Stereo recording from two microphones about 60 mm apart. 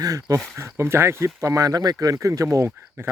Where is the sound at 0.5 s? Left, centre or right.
Right.